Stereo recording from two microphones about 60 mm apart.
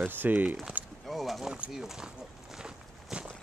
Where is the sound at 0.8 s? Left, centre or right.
Right.